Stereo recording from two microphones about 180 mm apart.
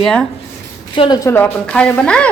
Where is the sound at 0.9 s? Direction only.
25° left (ahead or behind); by 2.3 s 5° left (ahead or behind).